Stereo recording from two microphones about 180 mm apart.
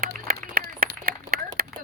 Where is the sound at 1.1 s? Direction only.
55° right (ahead or behind).